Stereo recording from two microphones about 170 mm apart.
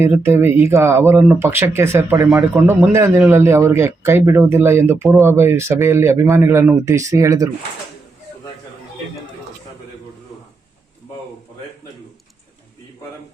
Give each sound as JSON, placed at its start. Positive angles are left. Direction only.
{"t": 0.0, "sound": "speech", "side_deg": -15}